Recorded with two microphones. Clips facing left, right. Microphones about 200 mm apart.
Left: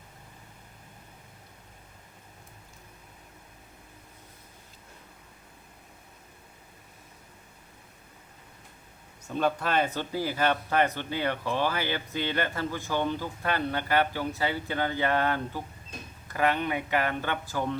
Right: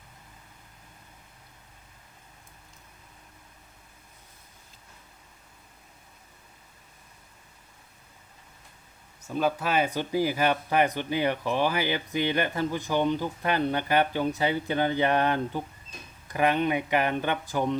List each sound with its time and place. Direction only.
9.2 s speech: 5° right (ahead or behind)